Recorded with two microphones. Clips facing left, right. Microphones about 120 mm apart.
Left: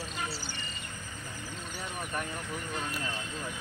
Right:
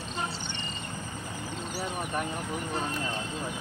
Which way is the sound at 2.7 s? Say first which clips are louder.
Right 4 dB; 35° right (ahead or behind).